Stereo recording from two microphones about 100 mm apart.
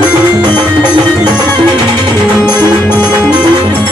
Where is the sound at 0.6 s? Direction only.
55° right (ahead or behind).